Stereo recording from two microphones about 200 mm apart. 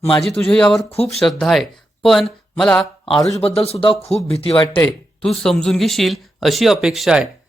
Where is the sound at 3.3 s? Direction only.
30° left (ahead or behind).